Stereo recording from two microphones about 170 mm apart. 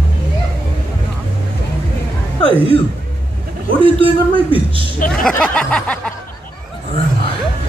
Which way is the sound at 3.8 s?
30° right (ahead or behind).